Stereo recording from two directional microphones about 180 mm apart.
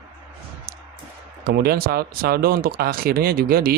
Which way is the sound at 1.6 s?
60° right (ahead or behind).